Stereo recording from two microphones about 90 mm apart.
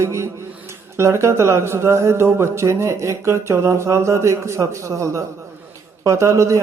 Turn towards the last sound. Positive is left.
turn(degrees=-35)  # may be behind; listen again after turning